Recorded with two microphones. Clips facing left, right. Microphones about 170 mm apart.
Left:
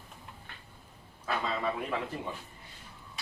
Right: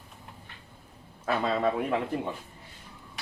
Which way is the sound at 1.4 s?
60° right (ahead or behind).